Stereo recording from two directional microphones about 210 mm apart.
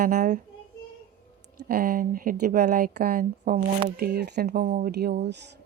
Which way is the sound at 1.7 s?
45° right (ahead or behind).